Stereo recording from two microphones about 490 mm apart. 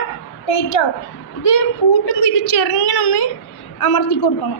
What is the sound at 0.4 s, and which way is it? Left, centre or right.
A child's voice, left.